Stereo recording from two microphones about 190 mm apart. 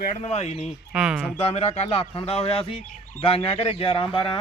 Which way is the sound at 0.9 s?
5° right (ahead or behind).